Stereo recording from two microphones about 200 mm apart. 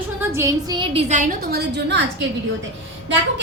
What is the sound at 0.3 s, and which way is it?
A woman's voice, 15° right (ahead or behind).